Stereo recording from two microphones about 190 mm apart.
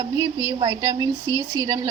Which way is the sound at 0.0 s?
15° right (ahead or behind).